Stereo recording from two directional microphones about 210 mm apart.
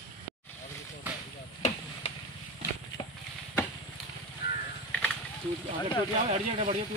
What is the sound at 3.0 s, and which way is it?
Horse, 25° left (ahead or behind).